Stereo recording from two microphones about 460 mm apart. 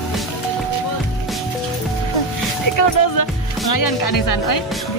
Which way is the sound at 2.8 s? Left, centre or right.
Left.